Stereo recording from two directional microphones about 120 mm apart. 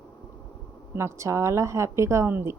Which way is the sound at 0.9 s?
25° right (ahead or behind).